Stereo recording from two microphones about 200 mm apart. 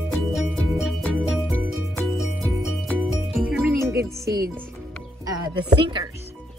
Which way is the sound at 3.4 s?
5° right (ahead or behind).